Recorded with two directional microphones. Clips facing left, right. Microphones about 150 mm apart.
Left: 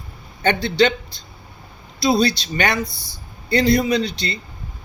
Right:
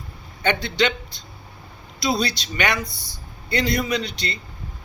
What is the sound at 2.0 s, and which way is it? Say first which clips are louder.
Speech: left 6 dB; 30° left (ahead or behind).